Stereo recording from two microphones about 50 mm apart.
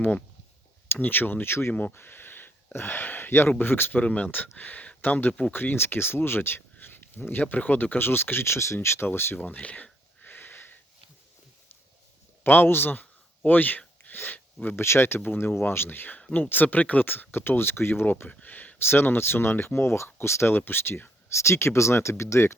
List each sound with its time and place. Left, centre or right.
0.9 s speech: left
1.7 s speech: left
4.0 s speech: left
5.7 s speech: left
9.0 s speech: left
9.4 s speech: left
10.2 s sniff: left
12.4 s a sound: left
14.8 s speech: left
15.2 s speech: left
18.3 s speech: left
18.8 s speech: left